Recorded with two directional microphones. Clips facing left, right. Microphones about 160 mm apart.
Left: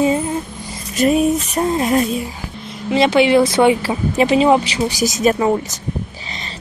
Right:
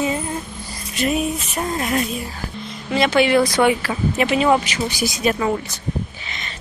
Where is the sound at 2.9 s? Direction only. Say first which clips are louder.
Left 3 dB; 20° left (ahead or behind); by 5.3 s 45° left (ahead or behind).